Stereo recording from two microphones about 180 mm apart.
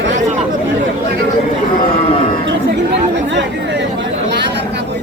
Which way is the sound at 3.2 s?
80° right.